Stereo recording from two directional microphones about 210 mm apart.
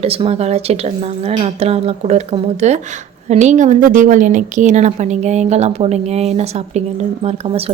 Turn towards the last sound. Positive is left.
turn(degrees=-30)  # may be behind; listen again after turning